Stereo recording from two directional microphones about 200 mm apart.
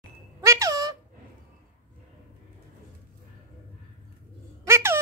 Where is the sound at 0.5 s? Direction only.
15° right (ahead or behind).